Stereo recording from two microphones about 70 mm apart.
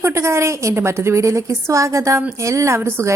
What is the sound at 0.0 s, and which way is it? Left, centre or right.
A woman's voice, right.